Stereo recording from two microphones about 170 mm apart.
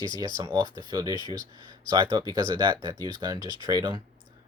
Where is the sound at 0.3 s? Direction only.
25° right (ahead or behind).